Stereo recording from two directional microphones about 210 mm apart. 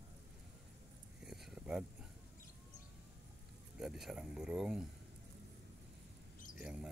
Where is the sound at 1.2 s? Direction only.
Centre (ahead or behind).